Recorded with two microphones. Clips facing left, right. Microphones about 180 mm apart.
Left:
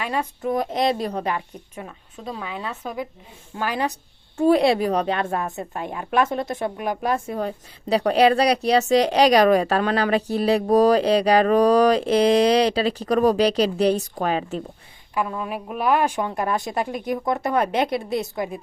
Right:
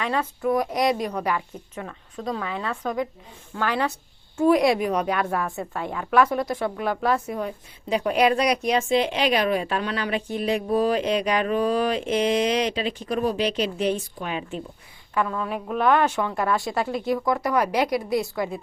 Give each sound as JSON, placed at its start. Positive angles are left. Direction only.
{"t": 0.0, "sound": "a woman's voice", "side_deg": 15}
{"t": 0.5, "sound": "a woman's voice", "side_deg": 25}
{"t": 1.7, "sound": "a woman's voice", "side_deg": 15}
{"t": 4.4, "sound": "a woman's voice", "side_deg": 30}
{"t": 7.3, "sound": "a woman's voice", "side_deg": 35}
{"t": 15.1, "sound": "a woman's voice", "side_deg": 15}